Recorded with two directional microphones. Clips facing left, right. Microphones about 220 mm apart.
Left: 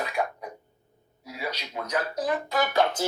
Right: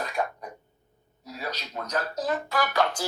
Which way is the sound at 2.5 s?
25° left (ahead or behind).